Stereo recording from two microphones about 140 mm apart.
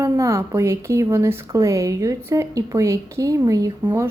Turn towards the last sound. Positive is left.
turn(degrees=-15)  # may be behind; listen again after turning